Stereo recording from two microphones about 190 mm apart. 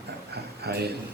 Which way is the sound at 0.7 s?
55° right (ahead or behind).